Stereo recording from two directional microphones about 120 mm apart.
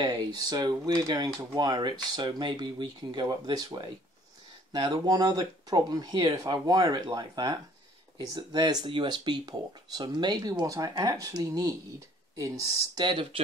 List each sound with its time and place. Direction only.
0.0 s speech: 35° right (ahead or behind)
13.0 s speech: 45° right (ahead or behind)